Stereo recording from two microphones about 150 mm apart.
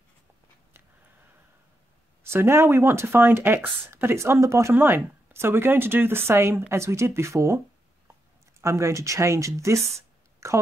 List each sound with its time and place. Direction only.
2.2 s speech: 15° right (ahead or behind)